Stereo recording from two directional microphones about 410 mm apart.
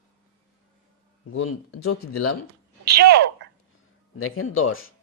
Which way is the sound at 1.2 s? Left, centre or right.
Left.